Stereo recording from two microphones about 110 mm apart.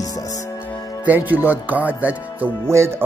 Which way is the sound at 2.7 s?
25° right (ahead or behind).